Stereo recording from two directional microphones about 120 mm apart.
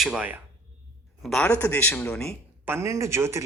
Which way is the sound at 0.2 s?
15° right (ahead or behind).